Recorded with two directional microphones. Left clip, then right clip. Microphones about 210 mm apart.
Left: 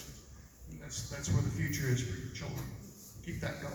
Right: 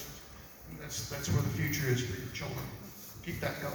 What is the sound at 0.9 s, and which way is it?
A man's voice, 20° left (ahead or behind).